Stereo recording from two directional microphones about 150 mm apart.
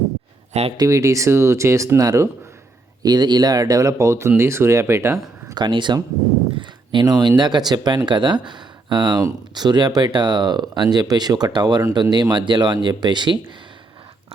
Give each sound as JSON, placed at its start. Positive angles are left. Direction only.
{"t": 0.8, "sound": "speech", "side_deg": -20}